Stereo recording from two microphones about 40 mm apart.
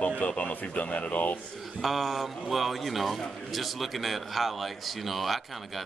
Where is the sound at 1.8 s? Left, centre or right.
Centre.